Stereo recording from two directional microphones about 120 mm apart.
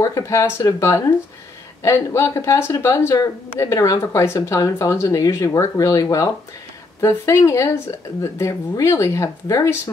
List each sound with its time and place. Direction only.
0.0 s speech: 25° left (ahead or behind)